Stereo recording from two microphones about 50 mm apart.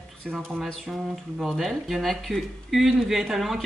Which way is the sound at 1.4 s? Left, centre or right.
Centre.